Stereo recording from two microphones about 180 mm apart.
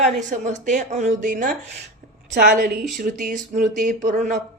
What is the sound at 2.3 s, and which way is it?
Speech, 60° right (ahead or behind).